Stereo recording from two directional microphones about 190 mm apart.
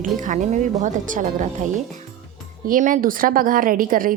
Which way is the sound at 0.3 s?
40° right (ahead or behind).